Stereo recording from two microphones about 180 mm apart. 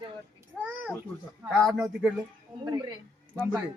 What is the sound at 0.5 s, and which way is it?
A man's voice, centre (ahead or behind).